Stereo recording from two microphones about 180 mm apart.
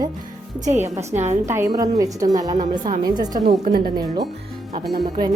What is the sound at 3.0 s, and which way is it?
A woman's voice, 25° right (ahead or behind).